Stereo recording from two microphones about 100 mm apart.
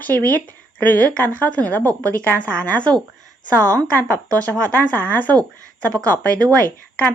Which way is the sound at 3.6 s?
35° right (ahead or behind).